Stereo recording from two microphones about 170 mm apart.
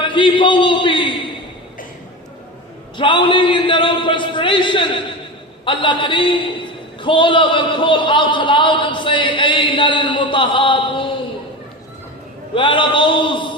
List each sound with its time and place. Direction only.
0.1 s a man's voice: 30° left (ahead or behind)
3.0 s a man's voice: 30° left (ahead or behind)
12.5 s a man's voice: 30° left (ahead or behind)